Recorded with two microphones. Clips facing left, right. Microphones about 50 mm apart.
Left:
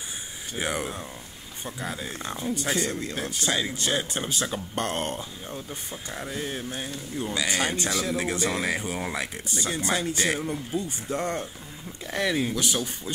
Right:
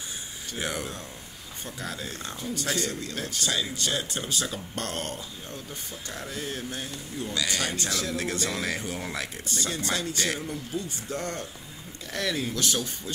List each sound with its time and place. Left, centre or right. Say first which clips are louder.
0.6 s speech: left 3 dB; left